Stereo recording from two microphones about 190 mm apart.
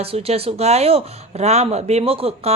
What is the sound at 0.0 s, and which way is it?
Speech, 30° right (ahead or behind).